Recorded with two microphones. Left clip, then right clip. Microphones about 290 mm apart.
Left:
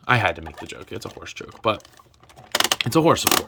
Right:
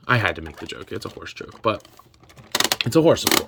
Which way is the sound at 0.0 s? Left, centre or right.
Centre.